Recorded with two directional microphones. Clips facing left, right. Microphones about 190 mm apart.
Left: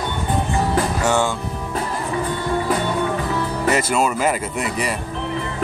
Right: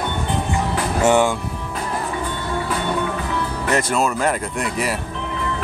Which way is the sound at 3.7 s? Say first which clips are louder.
Even; 5° left (ahead or behind).